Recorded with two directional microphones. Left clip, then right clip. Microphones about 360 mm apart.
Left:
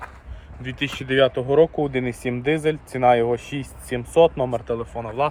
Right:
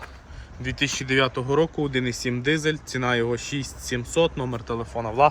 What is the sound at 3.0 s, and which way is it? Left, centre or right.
Speech, right.